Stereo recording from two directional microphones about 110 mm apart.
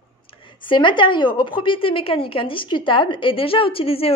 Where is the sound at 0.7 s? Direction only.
45° left (ahead or behind).